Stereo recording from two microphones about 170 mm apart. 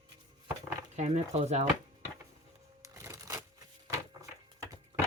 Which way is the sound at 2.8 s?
15° right (ahead or behind).